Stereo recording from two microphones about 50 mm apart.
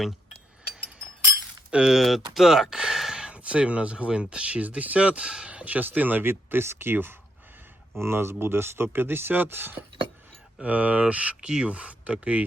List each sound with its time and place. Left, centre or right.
1.7 s speech: centre
2.0 s speech: centre
3.3 s speech: right
10.6 s speech: right